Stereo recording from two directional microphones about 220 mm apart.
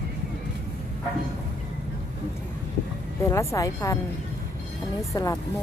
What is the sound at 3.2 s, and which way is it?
Speech, 15° left (ahead or behind).